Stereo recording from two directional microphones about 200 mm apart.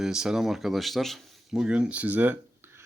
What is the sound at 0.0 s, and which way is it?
Speech, 5° right (ahead or behind).